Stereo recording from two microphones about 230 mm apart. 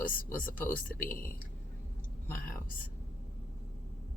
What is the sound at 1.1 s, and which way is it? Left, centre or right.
Speech, left.